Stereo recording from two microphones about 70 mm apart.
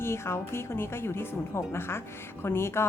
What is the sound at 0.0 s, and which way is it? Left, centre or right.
Speech, left.